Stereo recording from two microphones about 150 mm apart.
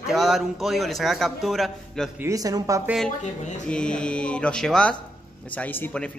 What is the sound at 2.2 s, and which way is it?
Speech, 25° right (ahead or behind).